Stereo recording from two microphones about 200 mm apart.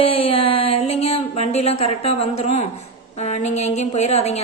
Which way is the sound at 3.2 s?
35° left (ahead or behind).